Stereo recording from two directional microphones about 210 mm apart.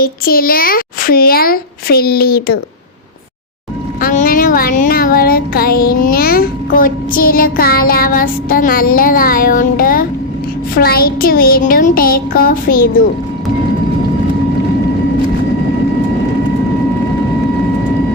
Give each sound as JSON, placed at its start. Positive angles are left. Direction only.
{"t": 0.0, "sound": "a child's voice", "side_deg": 45}
{"t": 4.0, "sound": "a child's voice", "side_deg": 40}